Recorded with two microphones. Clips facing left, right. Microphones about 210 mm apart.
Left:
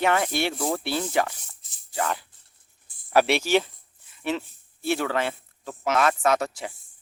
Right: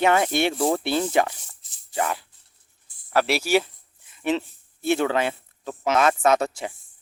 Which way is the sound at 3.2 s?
5° right (ahead or behind).